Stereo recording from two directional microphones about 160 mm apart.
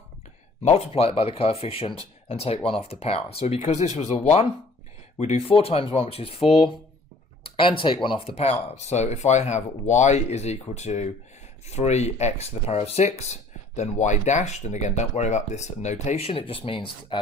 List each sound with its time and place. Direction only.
0.6 s speech: 40° left (ahead or behind)